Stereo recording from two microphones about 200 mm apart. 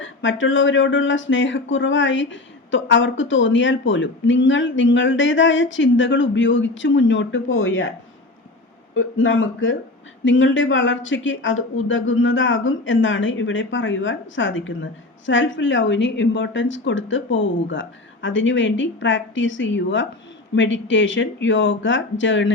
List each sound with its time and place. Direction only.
0.0 s speech: 70° left (ahead or behind)
9.0 s speech: 70° left (ahead or behind)